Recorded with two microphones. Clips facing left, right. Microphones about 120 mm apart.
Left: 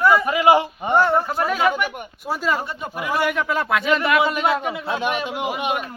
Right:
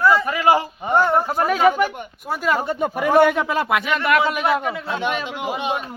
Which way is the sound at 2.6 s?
50° right (ahead or behind).